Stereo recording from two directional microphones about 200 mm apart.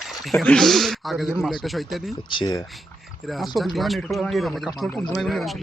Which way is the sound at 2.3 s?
20° left (ahead or behind).